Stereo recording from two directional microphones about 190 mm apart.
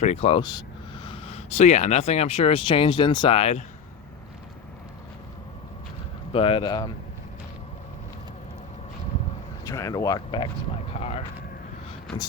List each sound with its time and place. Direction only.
0.0 s speech: 35° left (ahead or behind)
6.3 s speech: 30° left (ahead or behind)
9.6 s speech: 15° left (ahead or behind); by 11.1 s 35° left (ahead or behind)